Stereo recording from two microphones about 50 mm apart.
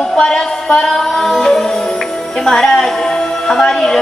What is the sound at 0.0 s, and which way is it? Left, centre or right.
Music, centre.